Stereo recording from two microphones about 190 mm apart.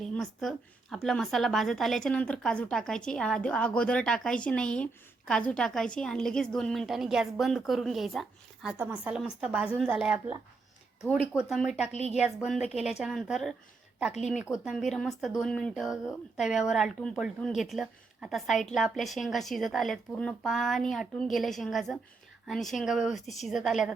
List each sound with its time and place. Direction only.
0.0 s speech: centre (ahead or behind)
14.1 s speech: 35° left (ahead or behind)
14.5 s speech: centre (ahead or behind)